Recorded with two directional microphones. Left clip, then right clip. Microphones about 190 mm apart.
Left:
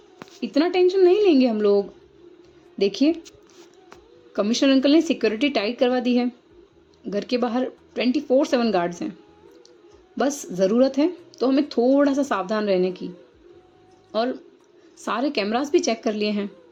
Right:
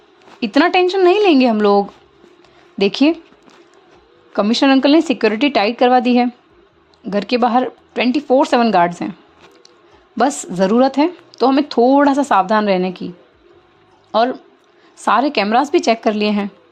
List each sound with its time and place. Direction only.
0.3 s speech: 35° right (ahead or behind)
4.3 s speech: 30° right (ahead or behind)
10.2 s speech: 35° right (ahead or behind)
14.1 s a woman's voice: 25° right (ahead or behind)